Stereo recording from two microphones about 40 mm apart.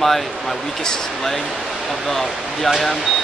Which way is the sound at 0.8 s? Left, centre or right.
Centre.